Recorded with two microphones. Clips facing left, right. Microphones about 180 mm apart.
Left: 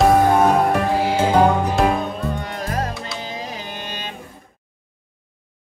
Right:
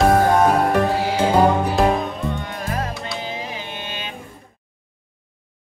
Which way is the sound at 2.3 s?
40° left (ahead or behind).